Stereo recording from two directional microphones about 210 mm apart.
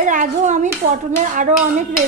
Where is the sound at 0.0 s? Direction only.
35° right (ahead or behind).